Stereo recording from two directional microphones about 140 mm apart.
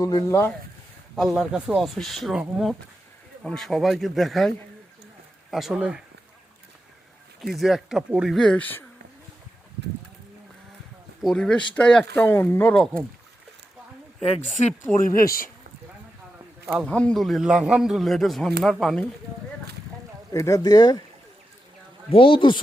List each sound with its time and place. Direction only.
0.0 s speech: 25° left (ahead or behind)
1.1 s a man's voice: centre (ahead or behind)
7.4 s a man's voice: centre (ahead or behind)
11.2 s a man's voice: 5° left (ahead or behind)
15.0 s speech: 90° left
16.6 s a man's voice: 5° left (ahead or behind)
20.3 s speech: 20° left (ahead or behind)
22.1 s speech: 40° left (ahead or behind)